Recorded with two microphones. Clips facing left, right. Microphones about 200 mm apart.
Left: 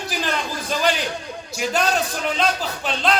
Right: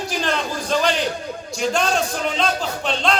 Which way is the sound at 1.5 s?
5° left (ahead or behind).